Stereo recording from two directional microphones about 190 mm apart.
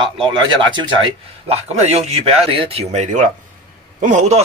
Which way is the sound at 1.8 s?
35° right (ahead or behind).